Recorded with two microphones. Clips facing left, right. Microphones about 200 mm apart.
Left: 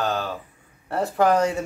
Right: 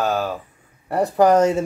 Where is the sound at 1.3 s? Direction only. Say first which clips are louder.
Right 5 dB; 20° right (ahead or behind).